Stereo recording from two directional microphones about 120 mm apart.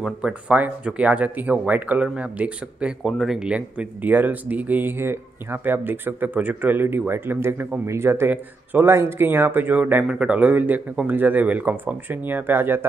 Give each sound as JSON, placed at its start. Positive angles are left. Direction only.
{"t": 0.0, "sound": "speech", "side_deg": -10}